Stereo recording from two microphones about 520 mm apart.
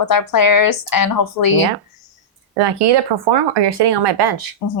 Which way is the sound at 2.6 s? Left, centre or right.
Right.